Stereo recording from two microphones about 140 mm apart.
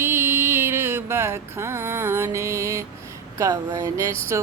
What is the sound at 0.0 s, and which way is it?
Music, 15° right (ahead or behind).